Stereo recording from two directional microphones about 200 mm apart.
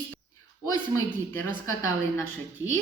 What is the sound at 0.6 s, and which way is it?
Speech, 15° left (ahead or behind).